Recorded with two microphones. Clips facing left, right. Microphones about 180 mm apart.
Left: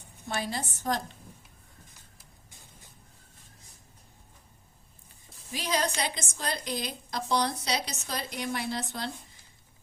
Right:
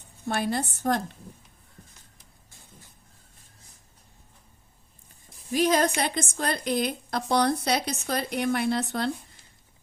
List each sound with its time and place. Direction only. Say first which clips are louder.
0.3 s a woman's voice: right 6 dB; 55° right (ahead or behind)
5.5 s a woman's voice: right 8 dB; 50° right (ahead or behind)